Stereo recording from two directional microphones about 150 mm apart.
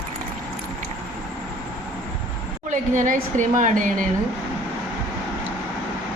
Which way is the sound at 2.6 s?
60° right (ahead or behind).